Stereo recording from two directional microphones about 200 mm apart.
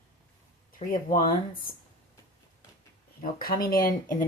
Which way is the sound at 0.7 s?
45° left (ahead or behind).